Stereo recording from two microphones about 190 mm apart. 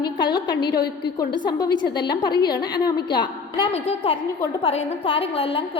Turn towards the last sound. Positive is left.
turn(degrees=30)  # may be behind; listen again after turning